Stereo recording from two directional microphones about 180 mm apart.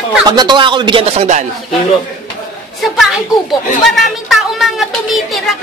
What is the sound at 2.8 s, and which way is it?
Speech, centre (ahead or behind).